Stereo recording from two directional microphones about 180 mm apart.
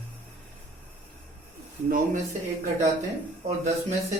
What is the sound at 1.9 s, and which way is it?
Speech, 45° right (ahead or behind).